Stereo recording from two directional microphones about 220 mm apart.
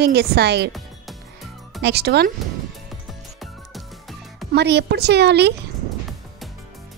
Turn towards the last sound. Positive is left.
turn(degrees=-50)  # may be behind; listen again after turning